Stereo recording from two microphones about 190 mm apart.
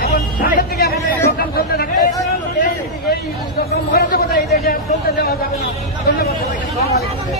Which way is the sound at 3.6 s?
50° left (ahead or behind).